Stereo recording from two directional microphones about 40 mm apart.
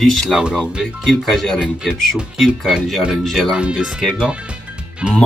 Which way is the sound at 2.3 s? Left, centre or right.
Centre.